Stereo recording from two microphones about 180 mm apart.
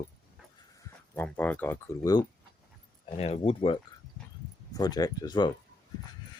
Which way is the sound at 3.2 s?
35° left (ahead or behind).